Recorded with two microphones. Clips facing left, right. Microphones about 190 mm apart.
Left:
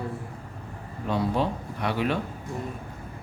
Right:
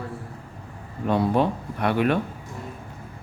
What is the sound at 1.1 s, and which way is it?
A man's voice, 55° right (ahead or behind).